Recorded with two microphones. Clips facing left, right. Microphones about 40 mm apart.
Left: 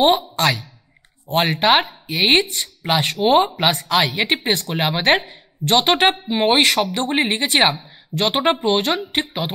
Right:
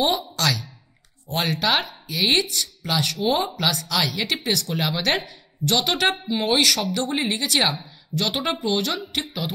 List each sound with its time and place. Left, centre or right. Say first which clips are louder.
0.0 s speech: left 6 dB; left